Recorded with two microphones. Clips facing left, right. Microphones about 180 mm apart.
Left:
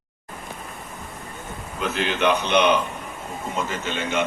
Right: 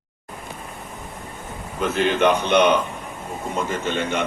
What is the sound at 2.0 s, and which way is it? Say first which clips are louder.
Speech: right 3 dB; 50° right (ahead or behind).